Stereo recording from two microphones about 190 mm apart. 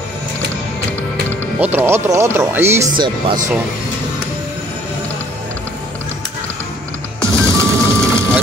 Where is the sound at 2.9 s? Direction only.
25° right (ahead or behind).